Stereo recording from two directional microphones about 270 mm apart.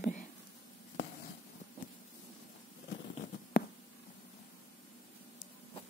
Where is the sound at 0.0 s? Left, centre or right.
Left.